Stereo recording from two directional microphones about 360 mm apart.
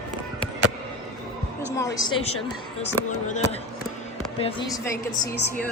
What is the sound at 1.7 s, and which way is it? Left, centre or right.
A woman's voice, centre.